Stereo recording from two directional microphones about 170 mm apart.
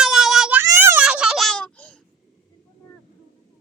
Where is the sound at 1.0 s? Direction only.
5° right (ahead or behind).